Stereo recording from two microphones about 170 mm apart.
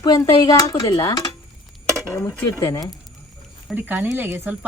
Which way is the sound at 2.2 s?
15° left (ahead or behind).